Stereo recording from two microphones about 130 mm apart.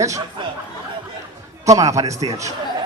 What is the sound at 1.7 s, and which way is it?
Speech, 25° right (ahead or behind).